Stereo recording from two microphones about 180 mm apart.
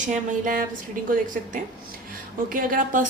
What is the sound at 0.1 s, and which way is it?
Speech, 50° right (ahead or behind).